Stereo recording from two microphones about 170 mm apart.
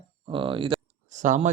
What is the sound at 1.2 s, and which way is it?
Speech, 45° right (ahead or behind).